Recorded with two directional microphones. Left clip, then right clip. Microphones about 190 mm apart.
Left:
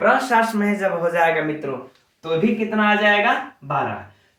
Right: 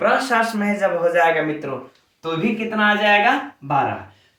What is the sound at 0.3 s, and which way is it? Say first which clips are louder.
Speech: left 1 dB; 15° left (ahead or behind).